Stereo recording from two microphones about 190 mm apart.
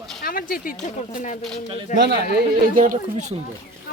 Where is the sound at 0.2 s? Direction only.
50° left (ahead or behind).